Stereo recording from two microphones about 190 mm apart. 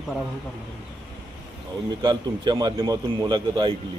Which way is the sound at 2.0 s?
25° right (ahead or behind).